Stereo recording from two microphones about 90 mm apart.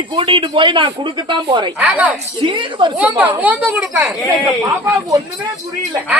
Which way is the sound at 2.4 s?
65° right (ahead or behind).